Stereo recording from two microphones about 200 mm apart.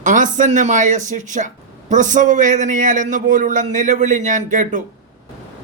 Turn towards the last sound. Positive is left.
turn(degrees=-40)  # may be behind; listen again after turning